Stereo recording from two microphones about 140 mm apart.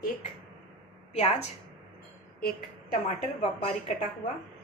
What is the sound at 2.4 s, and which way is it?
Speech, 90° left.